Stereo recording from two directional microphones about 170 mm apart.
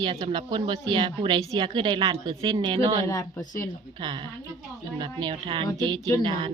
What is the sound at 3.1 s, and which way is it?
Speech, 20° left (ahead or behind).